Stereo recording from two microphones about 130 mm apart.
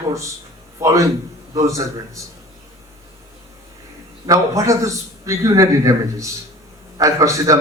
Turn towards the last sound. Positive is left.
turn(degrees=-25)  # may be behind; listen again after turning